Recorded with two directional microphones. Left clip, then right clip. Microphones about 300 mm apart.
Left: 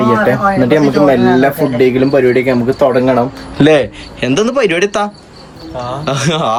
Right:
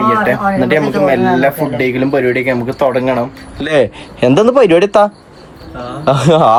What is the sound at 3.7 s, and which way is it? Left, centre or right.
Speech, centre.